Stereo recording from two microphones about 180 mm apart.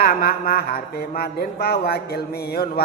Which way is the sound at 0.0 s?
60° left (ahead or behind).